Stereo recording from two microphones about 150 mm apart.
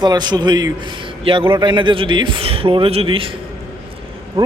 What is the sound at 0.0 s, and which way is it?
A man's voice, 30° right (ahead or behind).